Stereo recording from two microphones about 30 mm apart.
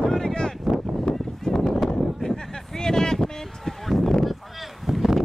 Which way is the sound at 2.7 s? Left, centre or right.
Left.